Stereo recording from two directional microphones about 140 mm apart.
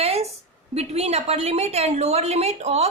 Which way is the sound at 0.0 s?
50° right (ahead or behind).